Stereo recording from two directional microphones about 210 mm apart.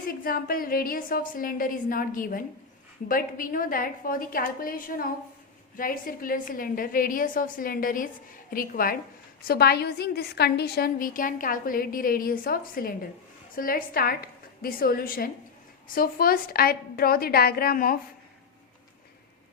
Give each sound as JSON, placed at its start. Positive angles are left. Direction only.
{"t": 0.1, "sound": "a woman's voice", "side_deg": 45}